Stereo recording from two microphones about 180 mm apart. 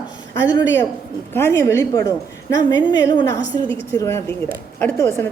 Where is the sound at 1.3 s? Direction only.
15° left (ahead or behind).